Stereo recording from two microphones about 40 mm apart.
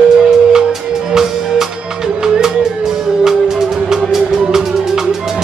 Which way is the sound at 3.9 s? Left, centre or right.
Centre.